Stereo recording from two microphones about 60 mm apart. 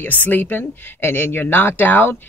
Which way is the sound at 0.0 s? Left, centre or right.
Left.